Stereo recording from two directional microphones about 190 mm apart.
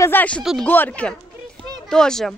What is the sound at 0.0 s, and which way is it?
Speech, 10° left (ahead or behind).